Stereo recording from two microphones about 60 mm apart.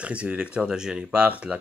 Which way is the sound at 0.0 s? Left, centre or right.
Centre.